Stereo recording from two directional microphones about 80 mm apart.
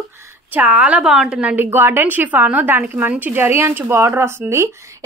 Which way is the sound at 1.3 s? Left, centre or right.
Right.